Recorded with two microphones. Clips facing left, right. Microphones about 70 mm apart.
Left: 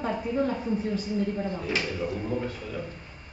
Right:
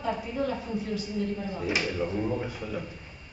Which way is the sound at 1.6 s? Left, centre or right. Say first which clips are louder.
Right 1 dB; centre.